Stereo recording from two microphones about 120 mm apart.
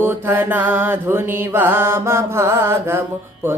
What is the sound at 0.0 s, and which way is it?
Mantra, 15° right (ahead or behind).